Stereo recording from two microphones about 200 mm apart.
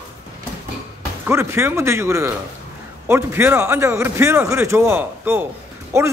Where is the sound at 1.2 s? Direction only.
15° right (ahead or behind).